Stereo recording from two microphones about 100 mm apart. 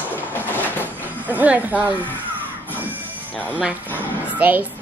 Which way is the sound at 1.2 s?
15° right (ahead or behind).